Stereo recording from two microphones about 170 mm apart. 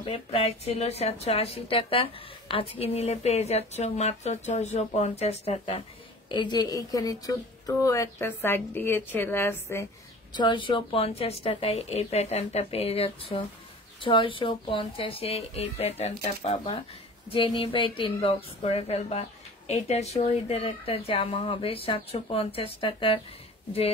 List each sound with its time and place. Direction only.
0.0 s speech: 35° left (ahead or behind)
6.2 s a woman's voice: 25° left (ahead or behind)
10.3 s speech: 25° left (ahead or behind)